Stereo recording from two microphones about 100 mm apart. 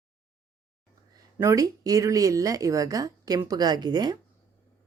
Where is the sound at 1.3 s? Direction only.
30° right (ahead or behind).